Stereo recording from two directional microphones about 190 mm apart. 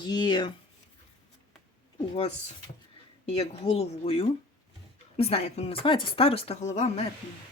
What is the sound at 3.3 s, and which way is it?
Speech, 35° left (ahead or behind).